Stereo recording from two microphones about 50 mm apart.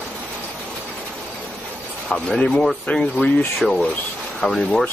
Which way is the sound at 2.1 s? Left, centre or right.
Centre.